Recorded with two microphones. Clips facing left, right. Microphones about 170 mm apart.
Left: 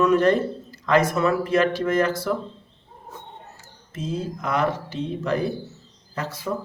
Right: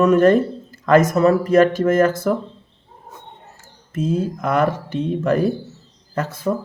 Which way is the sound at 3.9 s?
50° right (ahead or behind).